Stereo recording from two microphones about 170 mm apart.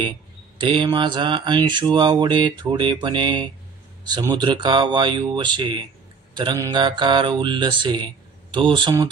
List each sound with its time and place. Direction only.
0.6 s mantra: 30° right (ahead or behind)